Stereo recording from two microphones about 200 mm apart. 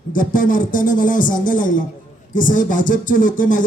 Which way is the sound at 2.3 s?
40° left (ahead or behind).